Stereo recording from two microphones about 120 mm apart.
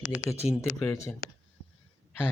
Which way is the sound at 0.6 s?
25° left (ahead or behind).